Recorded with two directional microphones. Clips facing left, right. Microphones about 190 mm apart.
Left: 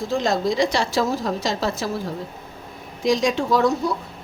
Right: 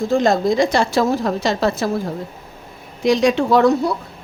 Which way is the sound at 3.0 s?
65° right (ahead or behind).